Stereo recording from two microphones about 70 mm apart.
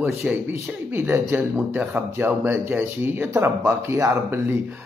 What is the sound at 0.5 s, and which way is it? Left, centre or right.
A man's voice, right.